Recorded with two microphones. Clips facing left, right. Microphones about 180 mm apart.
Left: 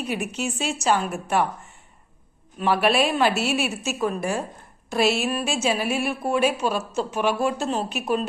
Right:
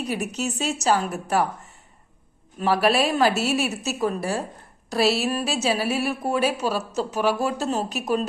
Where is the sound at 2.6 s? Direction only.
40° right (ahead or behind).